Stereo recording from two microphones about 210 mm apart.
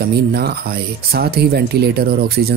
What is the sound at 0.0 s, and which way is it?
Speech, 50° right (ahead or behind).